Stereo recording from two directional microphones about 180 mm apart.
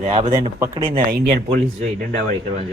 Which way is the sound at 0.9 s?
55° right (ahead or behind).